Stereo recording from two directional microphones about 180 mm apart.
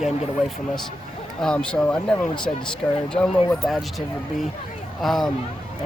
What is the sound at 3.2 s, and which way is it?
Speech, centre (ahead or behind).